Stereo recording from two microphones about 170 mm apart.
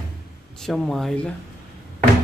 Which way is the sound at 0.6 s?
Centre (ahead or behind).